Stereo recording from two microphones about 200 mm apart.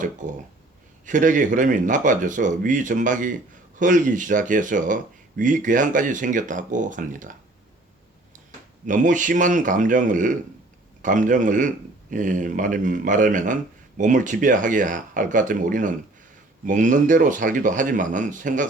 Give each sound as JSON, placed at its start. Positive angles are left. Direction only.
{"t": 0.0, "sound": "speech", "side_deg": -40}
{"t": 8.9, "sound": "speech", "side_deg": -40}